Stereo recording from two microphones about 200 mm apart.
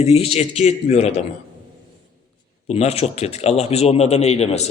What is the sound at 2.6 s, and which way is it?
A man's voice, 30° left (ahead or behind).